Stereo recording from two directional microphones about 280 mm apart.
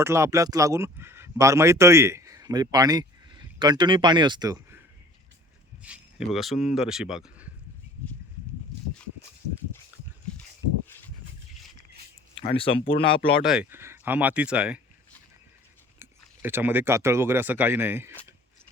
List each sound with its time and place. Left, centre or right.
0.0 s speech: centre
5.8 s speech: centre
12.4 s speech: centre
13.4 s speech: centre
16.0 s speech: centre